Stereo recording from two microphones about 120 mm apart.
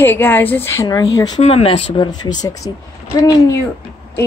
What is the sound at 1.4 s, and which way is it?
Speech, 60° left (ahead or behind).